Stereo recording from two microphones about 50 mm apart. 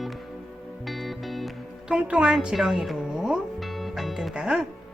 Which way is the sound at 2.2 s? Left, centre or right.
Centre.